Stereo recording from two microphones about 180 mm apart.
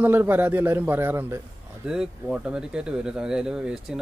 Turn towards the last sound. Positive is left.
turn(degrees=-5)  # may be behind; listen again after turning